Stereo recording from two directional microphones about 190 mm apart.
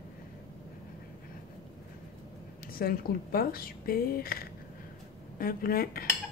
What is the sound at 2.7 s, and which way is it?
A woman's voice, 50° left (ahead or behind).